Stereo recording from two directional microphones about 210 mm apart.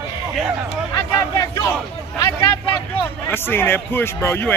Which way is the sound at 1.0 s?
15° left (ahead or behind).